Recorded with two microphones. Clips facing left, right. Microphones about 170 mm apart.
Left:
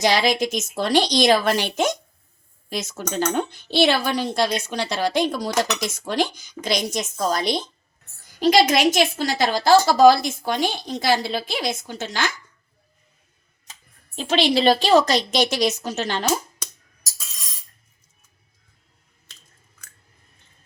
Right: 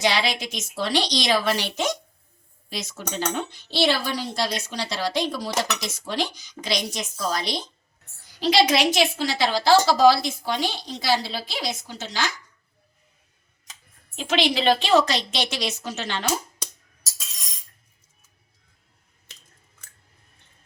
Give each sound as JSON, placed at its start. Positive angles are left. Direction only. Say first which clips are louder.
{"t": 0.0, "sound": "speech", "louder": "left 5 dB", "side_deg": 45}
{"t": 14.2, "sound": "a woman's voice", "louder": "left 4 dB", "side_deg": 35}